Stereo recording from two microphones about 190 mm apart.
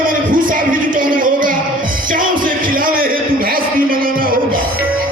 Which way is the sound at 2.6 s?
50° right (ahead or behind).